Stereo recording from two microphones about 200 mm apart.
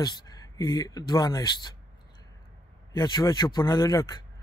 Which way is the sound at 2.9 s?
20° left (ahead or behind).